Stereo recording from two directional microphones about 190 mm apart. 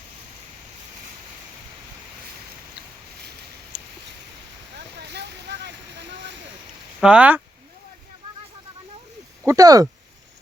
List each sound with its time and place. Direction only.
4.9 s a sound: 60° right (ahead or behind)
7.0 s speech: 5° right (ahead or behind)
9.5 s speech: 20° right (ahead or behind)